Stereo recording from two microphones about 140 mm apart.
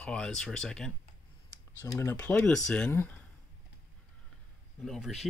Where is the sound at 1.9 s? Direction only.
15° left (ahead or behind).